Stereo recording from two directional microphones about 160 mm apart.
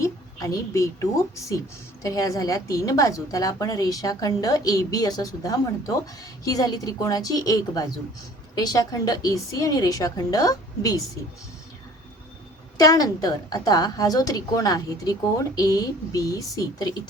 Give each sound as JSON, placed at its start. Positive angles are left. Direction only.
{"t": 0.0, "sound": "a woman's voice", "side_deg": 20}
{"t": 12.8, "sound": "a woman's voice", "side_deg": 20}